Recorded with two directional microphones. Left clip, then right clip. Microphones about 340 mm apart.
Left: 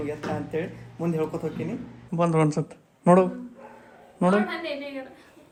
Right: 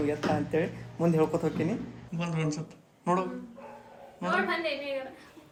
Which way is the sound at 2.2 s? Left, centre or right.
Centre.